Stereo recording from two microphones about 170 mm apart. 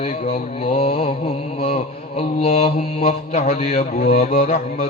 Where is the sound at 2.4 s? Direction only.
35° left (ahead or behind).